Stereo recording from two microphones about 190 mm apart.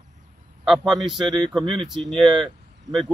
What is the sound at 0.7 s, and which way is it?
A man's voice, centre (ahead or behind).